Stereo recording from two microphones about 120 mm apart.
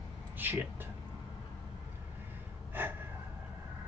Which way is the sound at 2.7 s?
15° right (ahead or behind).